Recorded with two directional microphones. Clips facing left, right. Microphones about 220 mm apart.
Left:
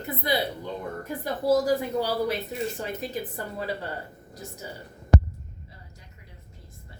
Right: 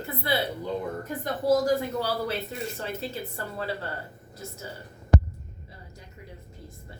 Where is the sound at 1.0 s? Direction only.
10° left (ahead or behind).